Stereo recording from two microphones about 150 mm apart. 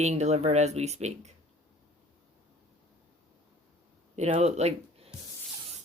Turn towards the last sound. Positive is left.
turn(degrees=-45)  # may be behind; listen again after turning